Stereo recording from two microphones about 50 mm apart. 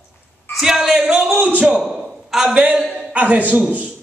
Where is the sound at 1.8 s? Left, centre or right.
Centre.